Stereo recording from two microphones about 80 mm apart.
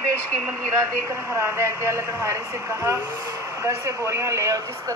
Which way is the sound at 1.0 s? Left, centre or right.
Right.